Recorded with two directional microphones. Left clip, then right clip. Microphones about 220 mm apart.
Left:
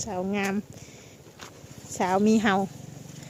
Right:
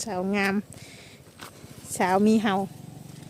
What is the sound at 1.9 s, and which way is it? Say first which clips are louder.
Speech: right 1 dB; 10° right (ahead or behind).